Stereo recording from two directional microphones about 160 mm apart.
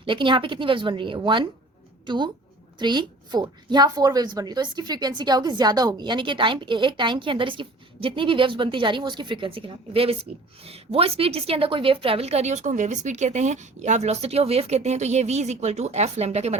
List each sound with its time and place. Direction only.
0.0 s a woman's voice: 30° right (ahead or behind)